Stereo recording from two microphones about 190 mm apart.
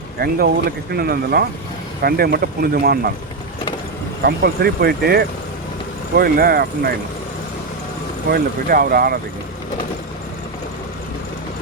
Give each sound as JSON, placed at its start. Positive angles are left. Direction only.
{"t": 0.2, "sound": "speech", "side_deg": -55}
{"t": 4.2, "sound": "speech", "side_deg": -55}
{"t": 8.3, "sound": "speech", "side_deg": -50}